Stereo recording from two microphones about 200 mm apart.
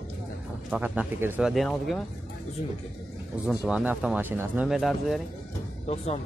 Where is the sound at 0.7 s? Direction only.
10° right (ahead or behind).